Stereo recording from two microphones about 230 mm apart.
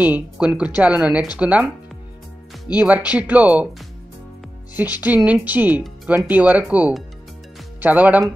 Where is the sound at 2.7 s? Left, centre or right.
Centre.